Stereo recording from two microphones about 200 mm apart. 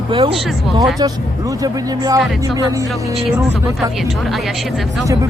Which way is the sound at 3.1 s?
Centre (ahead or behind).